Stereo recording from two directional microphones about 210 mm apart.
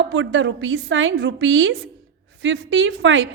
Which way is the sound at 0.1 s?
65° right (ahead or behind).